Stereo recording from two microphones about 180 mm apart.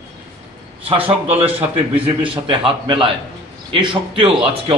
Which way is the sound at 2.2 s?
30° right (ahead or behind).